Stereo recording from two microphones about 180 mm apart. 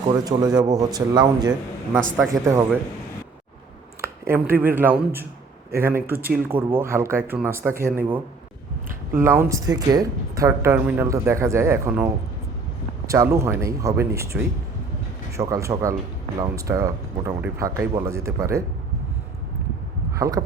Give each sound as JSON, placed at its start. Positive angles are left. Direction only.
{"t": 0.1, "sound": "speech", "side_deg": -20}
{"t": 4.0, "sound": "a sound", "side_deg": -15}
{"t": 4.6, "sound": "speech", "side_deg": -10}
{"t": 9.1, "sound": "speech", "side_deg": -15}
{"t": 13.1, "sound": "speech", "side_deg": -15}
{"t": 20.1, "sound": "speech", "side_deg": -20}